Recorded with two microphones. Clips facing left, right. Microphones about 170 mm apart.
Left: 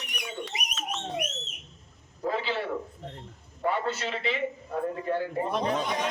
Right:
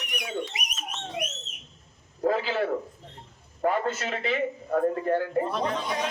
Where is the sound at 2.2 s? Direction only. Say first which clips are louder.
Right 4 dB; 45° right (ahead or behind).